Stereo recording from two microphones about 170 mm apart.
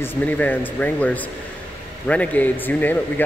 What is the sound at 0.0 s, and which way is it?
Speech, 10° left (ahead or behind).